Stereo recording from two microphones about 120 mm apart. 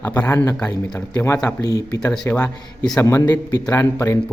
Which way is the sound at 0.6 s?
10° left (ahead or behind).